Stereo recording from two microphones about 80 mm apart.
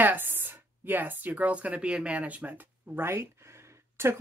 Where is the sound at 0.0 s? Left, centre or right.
Right.